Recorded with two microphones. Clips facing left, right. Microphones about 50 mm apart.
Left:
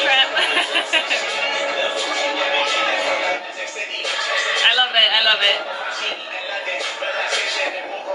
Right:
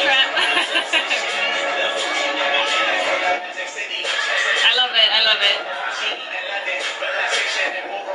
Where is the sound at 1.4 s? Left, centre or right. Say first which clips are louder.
Even; right.